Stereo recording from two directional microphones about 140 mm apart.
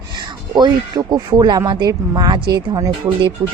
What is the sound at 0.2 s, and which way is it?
Speech, 30° right (ahead or behind).